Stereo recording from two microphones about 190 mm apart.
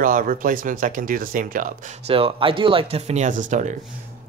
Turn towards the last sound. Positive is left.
turn(degrees=-40)  # may be behind; listen again after turning